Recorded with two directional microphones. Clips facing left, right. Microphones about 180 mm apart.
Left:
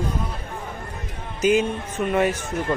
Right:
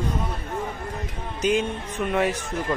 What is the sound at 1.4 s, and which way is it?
Speech, 5° left (ahead or behind).